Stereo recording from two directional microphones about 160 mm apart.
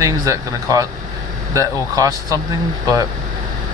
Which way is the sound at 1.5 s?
20° right (ahead or behind).